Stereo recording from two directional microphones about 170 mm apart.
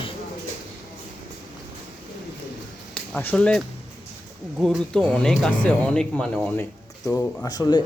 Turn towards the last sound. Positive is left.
turn(degrees=25)  # may be behind; listen again after turning